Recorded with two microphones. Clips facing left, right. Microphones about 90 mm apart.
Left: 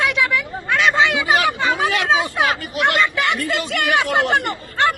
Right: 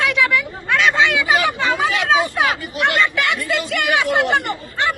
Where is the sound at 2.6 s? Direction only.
55° left (ahead or behind).